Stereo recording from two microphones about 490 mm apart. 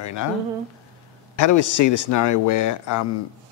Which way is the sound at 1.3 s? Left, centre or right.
Left.